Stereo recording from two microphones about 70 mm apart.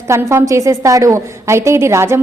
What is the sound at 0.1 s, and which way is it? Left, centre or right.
A woman's voice, right.